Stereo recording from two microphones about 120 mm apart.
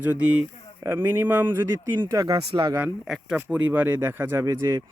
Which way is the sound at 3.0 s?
5° right (ahead or behind).